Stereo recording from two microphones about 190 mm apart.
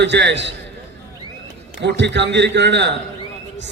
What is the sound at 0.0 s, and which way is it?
Speech, 65° right (ahead or behind).